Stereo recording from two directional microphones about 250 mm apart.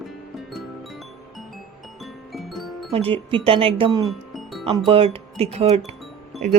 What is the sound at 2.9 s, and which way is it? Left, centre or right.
A woman's voice, right.